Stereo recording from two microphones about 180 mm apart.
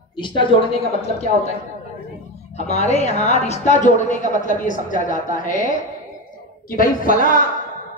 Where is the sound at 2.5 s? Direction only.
40° left (ahead or behind).